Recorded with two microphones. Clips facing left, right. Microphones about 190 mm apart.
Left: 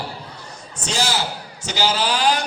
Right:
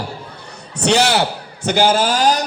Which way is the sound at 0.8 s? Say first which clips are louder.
Right 9 dB; 65° right (ahead or behind).